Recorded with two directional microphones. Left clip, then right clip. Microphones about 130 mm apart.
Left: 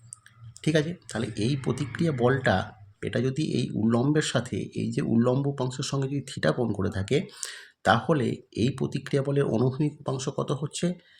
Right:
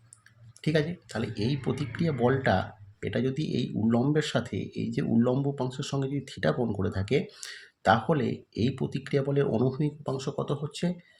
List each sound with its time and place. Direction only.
0.6 s speech: 30° left (ahead or behind)